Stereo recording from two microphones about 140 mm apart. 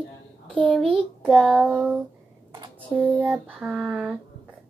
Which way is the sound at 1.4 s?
10° right (ahead or behind).